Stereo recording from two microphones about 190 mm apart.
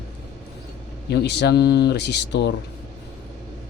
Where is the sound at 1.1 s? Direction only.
60° left (ahead or behind).